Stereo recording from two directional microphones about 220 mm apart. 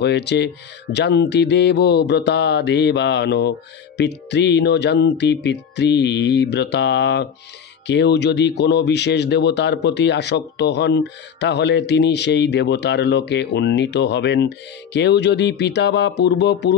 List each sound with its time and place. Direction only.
0.0 s speech: 50° left (ahead or behind)